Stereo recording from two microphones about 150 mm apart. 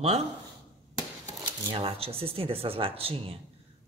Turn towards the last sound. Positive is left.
turn(degrees=-40)  # may be behind; listen again after turning